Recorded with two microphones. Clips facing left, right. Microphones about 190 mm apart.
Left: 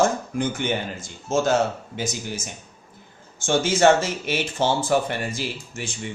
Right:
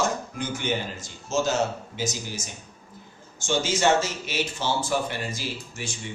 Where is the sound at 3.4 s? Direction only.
55° left (ahead or behind).